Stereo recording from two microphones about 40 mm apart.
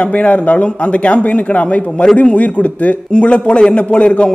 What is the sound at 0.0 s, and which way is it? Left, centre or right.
A man's voice, left.